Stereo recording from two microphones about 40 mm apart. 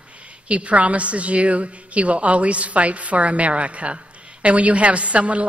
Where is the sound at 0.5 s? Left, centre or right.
Right.